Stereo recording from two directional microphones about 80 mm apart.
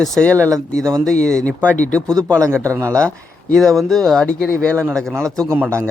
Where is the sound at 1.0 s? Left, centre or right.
Centre.